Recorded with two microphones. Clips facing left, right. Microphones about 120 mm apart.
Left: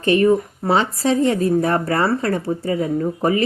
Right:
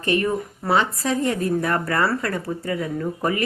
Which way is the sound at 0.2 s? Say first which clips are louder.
Left 8 dB; 25° left (ahead or behind).